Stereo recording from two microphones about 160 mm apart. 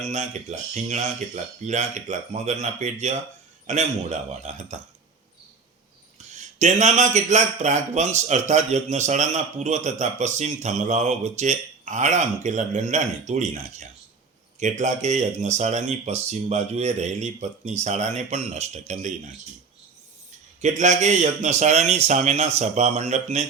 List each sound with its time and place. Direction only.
0.0 s a man's voice: 45° right (ahead or behind)
6.3 s a man's voice: 50° right (ahead or behind)
20.6 s a man's voice: 45° right (ahead or behind)